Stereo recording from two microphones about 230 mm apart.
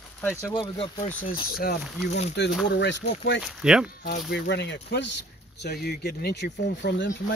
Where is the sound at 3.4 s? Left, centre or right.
Centre.